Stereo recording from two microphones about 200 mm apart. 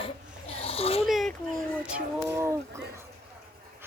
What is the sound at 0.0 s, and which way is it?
Snoring, 30° left (ahead or behind).